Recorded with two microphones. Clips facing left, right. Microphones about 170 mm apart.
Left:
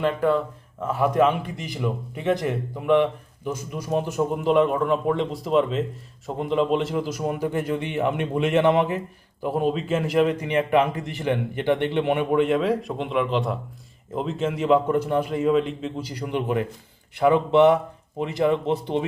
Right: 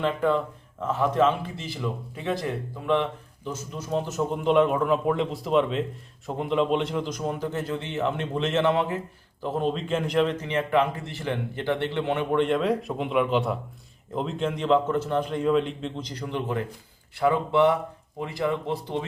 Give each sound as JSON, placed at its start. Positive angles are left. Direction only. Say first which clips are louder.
{"t": 0.0, "sound": "a man's voice", "louder": "left 2 dB", "side_deg": 5}